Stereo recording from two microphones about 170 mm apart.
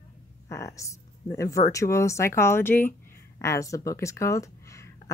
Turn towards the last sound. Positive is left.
turn(degrees=20)  # may be behind; listen again after turning